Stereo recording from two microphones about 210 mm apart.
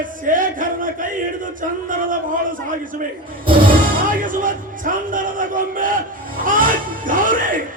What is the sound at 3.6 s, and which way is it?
Speech, 40° right (ahead or behind).